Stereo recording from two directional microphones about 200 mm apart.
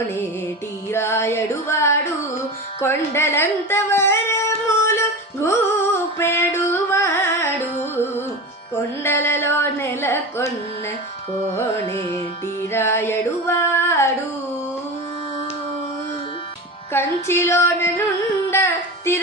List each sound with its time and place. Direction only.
0.9 s female singing: 10° left (ahead or behind)
2.8 s a sound: 10° left (ahead or behind)
9.0 s carnatic music: 10° left (ahead or behind)
11.9 s music: 30° right (ahead or behind)
12.7 s female singing: 10° left (ahead or behind)
17.2 s female singing: 10° left (ahead or behind)
18.5 s music: 10° left (ahead or behind)